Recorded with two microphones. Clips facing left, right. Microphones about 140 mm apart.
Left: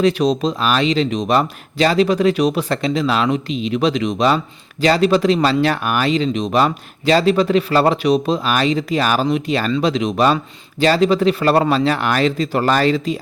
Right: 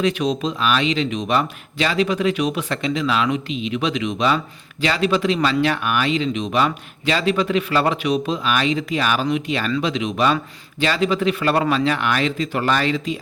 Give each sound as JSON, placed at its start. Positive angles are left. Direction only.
{"t": 0.0, "sound": "speech", "side_deg": 35}